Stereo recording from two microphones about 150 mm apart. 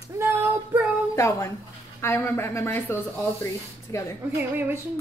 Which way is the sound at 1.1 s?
20° left (ahead or behind).